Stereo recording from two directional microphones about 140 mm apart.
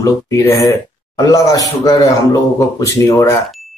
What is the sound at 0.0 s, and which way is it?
A man's voice, 20° left (ahead or behind).